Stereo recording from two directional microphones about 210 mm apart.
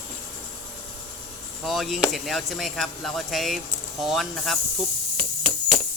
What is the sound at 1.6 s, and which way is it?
Speech, centre (ahead or behind).